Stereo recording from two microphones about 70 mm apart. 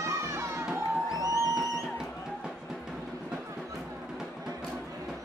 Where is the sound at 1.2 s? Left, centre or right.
Right.